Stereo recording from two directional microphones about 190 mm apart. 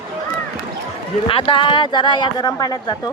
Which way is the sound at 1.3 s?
25° left (ahead or behind).